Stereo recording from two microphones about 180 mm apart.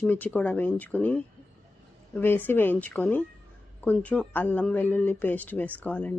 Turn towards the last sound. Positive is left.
turn(degrees=10)  # may be behind; listen again after turning